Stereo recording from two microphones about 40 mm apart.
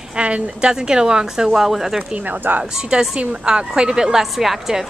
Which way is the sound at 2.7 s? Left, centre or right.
Right.